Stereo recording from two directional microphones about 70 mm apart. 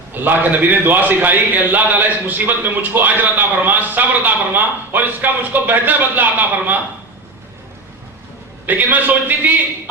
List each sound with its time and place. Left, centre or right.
0.1 s a man's voice: right
8.6 s a man's voice: right